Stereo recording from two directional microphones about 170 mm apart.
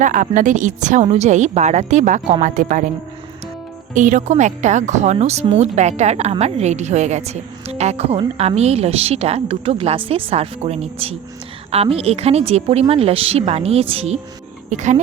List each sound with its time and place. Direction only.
0.0 s speech: 50° right (ahead or behind)
3.9 s a woman's voice: 50° right (ahead or behind)